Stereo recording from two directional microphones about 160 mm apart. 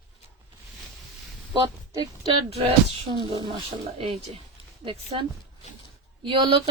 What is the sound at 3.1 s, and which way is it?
Speech, 30° right (ahead or behind).